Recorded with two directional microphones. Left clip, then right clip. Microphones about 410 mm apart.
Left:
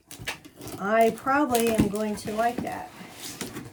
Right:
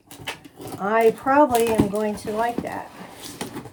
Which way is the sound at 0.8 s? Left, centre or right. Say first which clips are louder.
Right 3 dB; centre.